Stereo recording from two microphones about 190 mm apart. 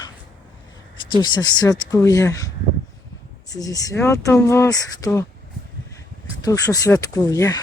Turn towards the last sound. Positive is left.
turn(degrees=20)  # may be behind; listen again after turning